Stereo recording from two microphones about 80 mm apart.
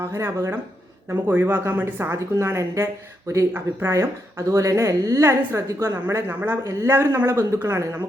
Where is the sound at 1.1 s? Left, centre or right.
Right.